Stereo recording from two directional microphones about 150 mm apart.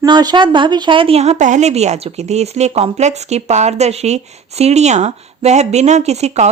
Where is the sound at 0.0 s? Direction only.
25° right (ahead or behind).